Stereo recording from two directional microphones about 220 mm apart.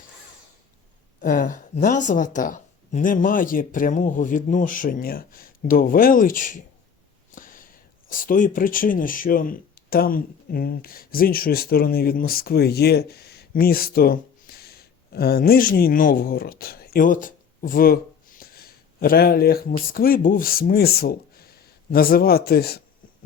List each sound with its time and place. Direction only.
1.2 s speech: 35° left (ahead or behind)